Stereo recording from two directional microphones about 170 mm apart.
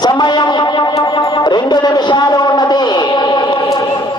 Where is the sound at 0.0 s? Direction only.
25° left (ahead or behind).